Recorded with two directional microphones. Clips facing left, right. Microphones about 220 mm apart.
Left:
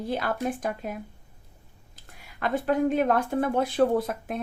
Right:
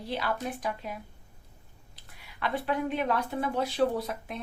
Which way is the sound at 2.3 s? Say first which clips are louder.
Left 5 dB; 45° left (ahead or behind).